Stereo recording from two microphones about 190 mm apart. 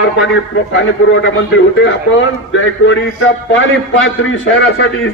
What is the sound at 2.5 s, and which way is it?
A man's voice, 90° left.